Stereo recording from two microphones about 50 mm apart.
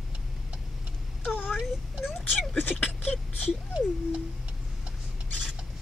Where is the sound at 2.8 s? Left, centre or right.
Centre.